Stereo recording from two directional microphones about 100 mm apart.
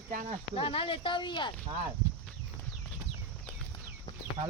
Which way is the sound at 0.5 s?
65° left (ahead or behind).